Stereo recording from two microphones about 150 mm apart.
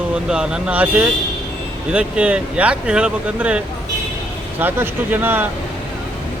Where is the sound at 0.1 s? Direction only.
5° right (ahead or behind).